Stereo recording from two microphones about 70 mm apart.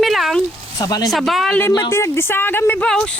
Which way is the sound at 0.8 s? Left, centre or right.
Left.